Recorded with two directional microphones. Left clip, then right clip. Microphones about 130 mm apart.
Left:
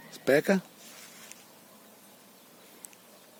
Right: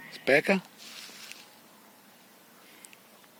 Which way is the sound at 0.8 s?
90° right.